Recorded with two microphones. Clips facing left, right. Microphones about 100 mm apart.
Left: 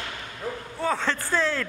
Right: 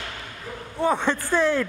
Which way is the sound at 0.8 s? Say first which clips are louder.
Right 5 dB; 15° right (ahead or behind).